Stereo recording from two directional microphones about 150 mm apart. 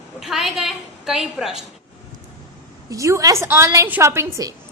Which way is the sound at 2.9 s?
20° right (ahead or behind).